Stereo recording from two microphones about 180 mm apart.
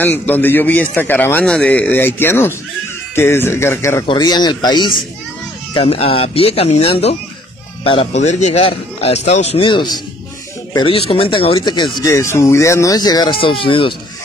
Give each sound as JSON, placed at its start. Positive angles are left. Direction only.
{"t": 0.0, "sound": "a man's voice", "side_deg": 10}
{"t": 4.0, "sound": "speech", "side_deg": 25}